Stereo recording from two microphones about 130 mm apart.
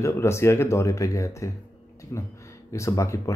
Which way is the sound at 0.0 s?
20° left (ahead or behind).